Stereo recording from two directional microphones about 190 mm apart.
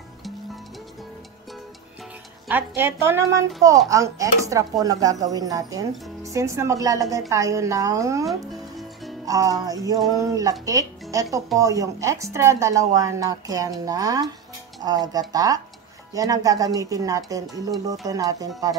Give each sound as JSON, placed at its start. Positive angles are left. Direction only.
{"t": 2.4, "sound": "speech", "side_deg": -10}
{"t": 8.3, "sound": "music", "side_deg": 0}
{"t": 9.2, "sound": "speech", "side_deg": -20}